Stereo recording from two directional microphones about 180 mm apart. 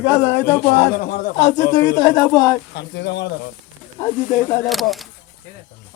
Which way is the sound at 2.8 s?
75° left (ahead or behind).